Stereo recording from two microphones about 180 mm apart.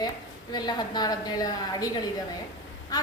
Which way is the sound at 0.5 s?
25° left (ahead or behind).